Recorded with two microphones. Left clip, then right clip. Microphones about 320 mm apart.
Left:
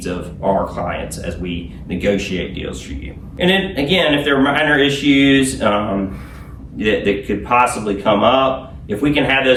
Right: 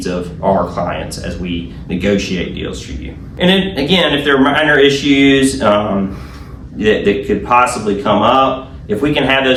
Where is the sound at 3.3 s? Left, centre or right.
Centre.